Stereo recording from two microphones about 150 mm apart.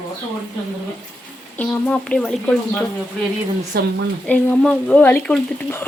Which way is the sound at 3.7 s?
90° right.